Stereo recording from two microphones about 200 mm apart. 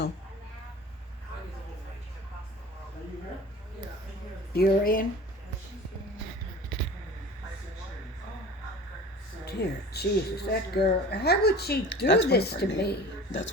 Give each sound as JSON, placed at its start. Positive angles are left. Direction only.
{"t": 4.5, "sound": "a woman's voice", "side_deg": 45}
{"t": 9.5, "sound": "a woman's voice", "side_deg": 55}